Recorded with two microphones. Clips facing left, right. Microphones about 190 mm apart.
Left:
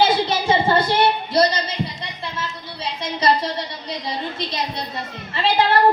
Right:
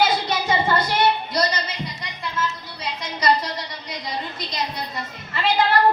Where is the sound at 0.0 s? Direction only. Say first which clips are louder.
Left 3 dB; 30° left (ahead or behind).